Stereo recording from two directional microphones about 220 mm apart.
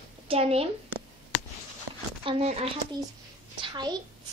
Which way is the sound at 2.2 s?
25° right (ahead or behind).